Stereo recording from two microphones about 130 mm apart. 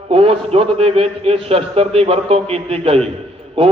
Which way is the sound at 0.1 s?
45° right (ahead or behind).